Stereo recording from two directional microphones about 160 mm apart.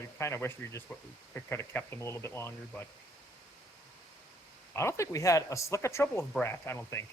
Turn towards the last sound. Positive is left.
turn(degrees=15)  # may be behind; listen again after turning